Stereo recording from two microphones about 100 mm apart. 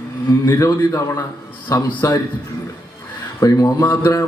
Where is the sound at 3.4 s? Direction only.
35° left (ahead or behind).